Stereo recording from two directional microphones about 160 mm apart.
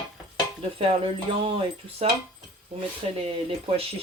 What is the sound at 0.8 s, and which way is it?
Speech, 35° right (ahead or behind).